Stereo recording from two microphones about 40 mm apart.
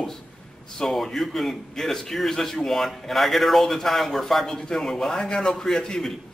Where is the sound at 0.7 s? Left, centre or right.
Centre.